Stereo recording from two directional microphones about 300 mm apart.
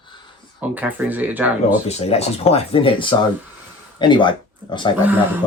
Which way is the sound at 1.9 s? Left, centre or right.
Left.